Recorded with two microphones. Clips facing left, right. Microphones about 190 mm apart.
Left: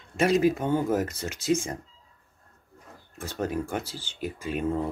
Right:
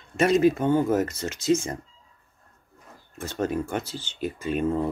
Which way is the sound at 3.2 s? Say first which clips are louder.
Right 3 dB; 10° left (ahead or behind).